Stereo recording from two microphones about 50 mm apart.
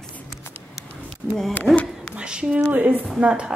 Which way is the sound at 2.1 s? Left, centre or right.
Centre.